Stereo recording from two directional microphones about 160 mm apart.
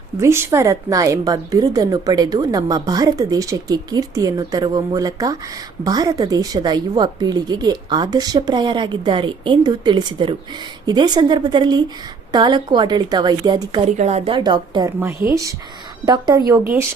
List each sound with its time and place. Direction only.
0.2 s a woman's voice: 15° right (ahead or behind)
13.9 s a woman's voice: 45° right (ahead or behind)
14.3 s a woman's voice: 30° right (ahead or behind)
16.0 s a woman's voice: 25° right (ahead or behind)